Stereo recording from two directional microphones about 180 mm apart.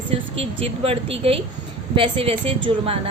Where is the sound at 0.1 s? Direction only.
30° right (ahead or behind).